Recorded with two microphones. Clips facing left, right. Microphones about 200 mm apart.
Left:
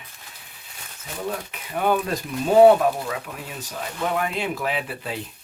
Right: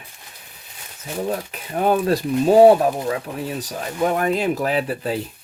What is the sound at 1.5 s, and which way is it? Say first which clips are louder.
Speech: right 2 dB; 35° right (ahead or behind).